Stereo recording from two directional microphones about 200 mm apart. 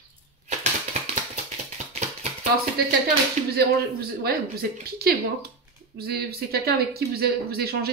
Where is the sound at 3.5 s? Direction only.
50° right (ahead or behind).